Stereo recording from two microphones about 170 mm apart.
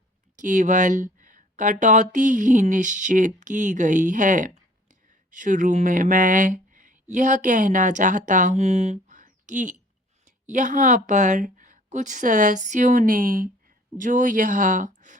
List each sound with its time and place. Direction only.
0.3 s speech: 50° right (ahead or behind)